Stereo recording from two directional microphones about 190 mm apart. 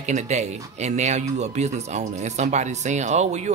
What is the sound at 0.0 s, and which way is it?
Speech, 35° right (ahead or behind).